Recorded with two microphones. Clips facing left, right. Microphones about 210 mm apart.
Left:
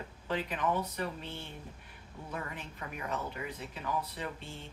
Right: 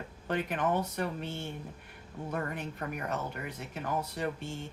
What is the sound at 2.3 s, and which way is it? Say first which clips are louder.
Speech: right 6 dB; 50° right (ahead or behind).